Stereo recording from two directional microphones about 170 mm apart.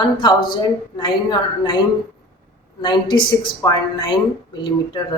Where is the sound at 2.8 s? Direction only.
25° left (ahead or behind).